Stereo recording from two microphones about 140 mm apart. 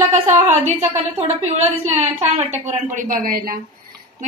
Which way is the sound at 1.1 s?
50° right (ahead or behind).